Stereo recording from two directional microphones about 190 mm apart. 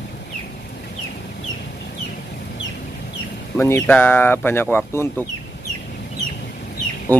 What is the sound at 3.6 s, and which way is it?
Speech, 10° left (ahead or behind).